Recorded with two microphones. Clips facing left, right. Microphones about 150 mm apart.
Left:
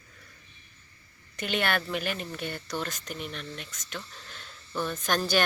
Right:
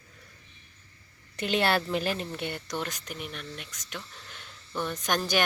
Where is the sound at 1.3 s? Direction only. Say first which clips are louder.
Right 3 dB; 30° right (ahead or behind).